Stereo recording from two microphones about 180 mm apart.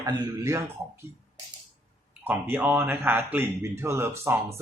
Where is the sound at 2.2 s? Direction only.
10° right (ahead or behind).